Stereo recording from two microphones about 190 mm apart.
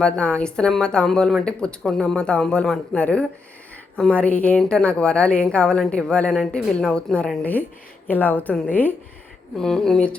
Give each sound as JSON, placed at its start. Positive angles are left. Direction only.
{"t": 0.0, "sound": "a woman's voice", "side_deg": 5}